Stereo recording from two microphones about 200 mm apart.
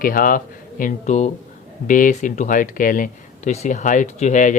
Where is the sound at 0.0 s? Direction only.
45° left (ahead or behind).